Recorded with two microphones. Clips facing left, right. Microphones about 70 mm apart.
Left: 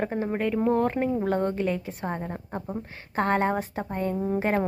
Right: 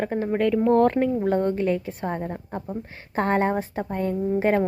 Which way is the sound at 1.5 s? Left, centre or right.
Right.